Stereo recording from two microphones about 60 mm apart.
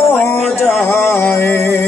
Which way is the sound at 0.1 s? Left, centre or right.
Left.